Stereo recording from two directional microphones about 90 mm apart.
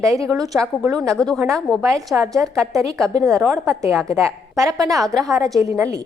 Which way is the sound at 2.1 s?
35° right (ahead or behind).